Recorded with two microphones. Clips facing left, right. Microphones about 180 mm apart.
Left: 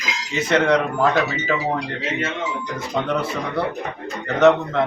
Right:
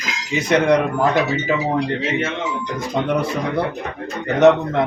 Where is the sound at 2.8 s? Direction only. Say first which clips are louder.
Right 3 dB; 15° right (ahead or behind).